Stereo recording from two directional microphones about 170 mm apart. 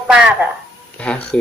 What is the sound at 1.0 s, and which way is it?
Speech, 5° left (ahead or behind).